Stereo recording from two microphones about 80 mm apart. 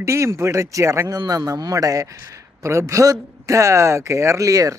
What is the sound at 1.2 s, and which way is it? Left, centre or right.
A man's voice, right.